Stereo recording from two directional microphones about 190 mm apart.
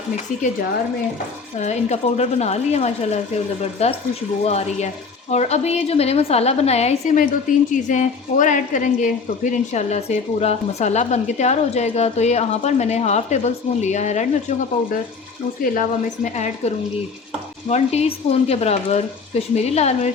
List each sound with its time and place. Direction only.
1.5 s a woman's voice: 35° left (ahead or behind)
15.6 s a woman's voice: 45° left (ahead or behind)